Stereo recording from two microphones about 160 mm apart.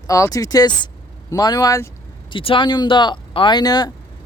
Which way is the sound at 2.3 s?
30° left (ahead or behind).